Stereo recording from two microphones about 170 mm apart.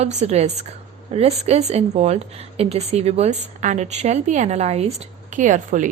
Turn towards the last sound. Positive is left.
turn(degrees=-50)  # may be behind; listen again after turning